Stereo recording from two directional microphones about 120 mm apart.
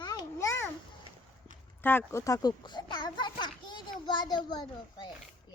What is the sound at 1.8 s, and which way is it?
A child's voice, 20° left (ahead or behind).